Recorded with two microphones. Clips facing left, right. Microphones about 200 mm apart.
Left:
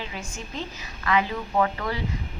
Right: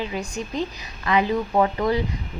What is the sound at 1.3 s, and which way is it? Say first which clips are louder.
Speech: right 4 dB; 25° right (ahead or behind).